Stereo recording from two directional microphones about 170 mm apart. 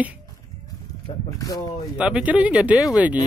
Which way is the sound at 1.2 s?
20° left (ahead or behind).